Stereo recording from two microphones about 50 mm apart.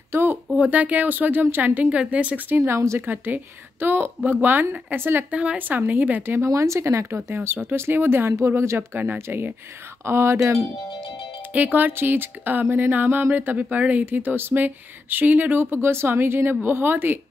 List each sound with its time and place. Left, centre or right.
0.1 s speech: right
0.6 s speech: right
2.6 s speech: right
3.8 s speech: right
5.3 s speech: right
5.6 s speech: right
6.4 s speech: right
7.2 s speech: right
8.4 s speech: right
8.9 s speech: right
10.0 s speech: right
11.5 s speech: right